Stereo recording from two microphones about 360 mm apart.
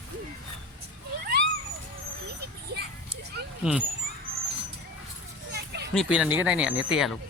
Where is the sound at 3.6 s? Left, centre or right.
Centre.